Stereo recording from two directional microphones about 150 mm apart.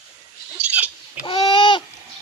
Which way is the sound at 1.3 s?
35° left (ahead or behind).